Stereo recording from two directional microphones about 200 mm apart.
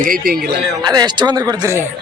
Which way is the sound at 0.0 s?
45° right (ahead or behind).